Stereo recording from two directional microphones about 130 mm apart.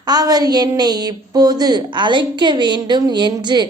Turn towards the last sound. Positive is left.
turn(degrees=-35)  # may be behind; listen again after turning